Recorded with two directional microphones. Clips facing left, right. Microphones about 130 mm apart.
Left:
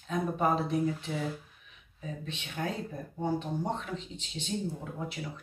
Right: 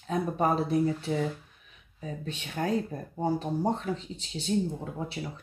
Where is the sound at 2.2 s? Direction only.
40° right (ahead or behind).